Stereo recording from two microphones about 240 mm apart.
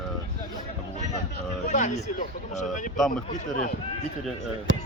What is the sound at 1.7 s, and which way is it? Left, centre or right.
Speech, left.